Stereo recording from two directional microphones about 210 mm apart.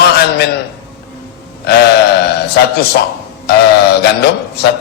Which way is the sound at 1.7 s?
50° left (ahead or behind).